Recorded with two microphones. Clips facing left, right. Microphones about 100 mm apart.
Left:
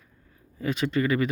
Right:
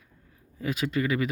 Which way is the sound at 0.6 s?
5° right (ahead or behind).